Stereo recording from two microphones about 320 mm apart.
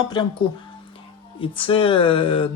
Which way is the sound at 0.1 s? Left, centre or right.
Centre.